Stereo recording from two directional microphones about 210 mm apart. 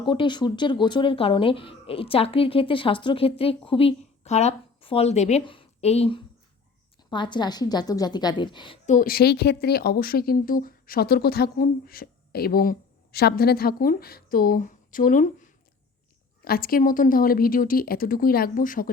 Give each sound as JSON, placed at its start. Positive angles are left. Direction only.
{"t": 0.0, "sound": "speech", "side_deg": 20}
{"t": 8.9, "sound": "speech", "side_deg": 40}